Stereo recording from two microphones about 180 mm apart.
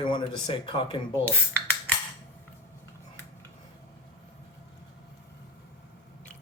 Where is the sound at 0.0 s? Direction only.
25° left (ahead or behind).